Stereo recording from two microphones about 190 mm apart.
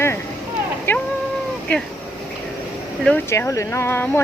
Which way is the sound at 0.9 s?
10° left (ahead or behind).